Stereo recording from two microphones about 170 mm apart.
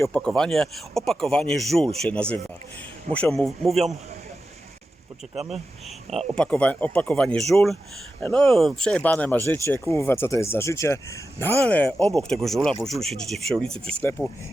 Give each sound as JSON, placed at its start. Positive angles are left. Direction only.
{"t": 0.0, "sound": "speech", "side_deg": 5}
{"t": 6.3, "sound": "speech", "side_deg": 5}